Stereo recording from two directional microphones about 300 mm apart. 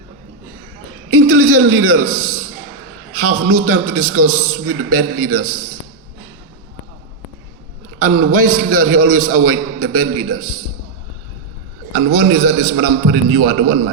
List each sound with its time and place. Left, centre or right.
1.1 s a man's voice: right
7.9 s a man's voice: right
12.0 s a man's voice: right